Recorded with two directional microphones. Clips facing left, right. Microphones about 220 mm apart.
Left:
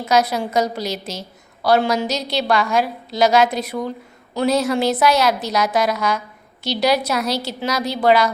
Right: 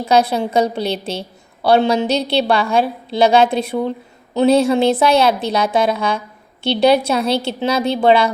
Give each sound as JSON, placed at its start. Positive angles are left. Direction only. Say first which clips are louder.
{"t": 0.0, "sound": "a woman's voice", "louder": "right 3 dB", "side_deg": -30}